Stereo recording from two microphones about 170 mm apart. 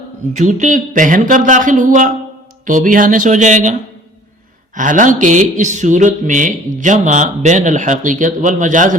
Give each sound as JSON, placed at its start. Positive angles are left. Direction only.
{"t": 0.3, "sound": "speech", "side_deg": -45}